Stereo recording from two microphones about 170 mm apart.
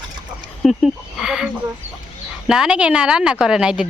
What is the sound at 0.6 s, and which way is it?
Speech, centre (ahead or behind).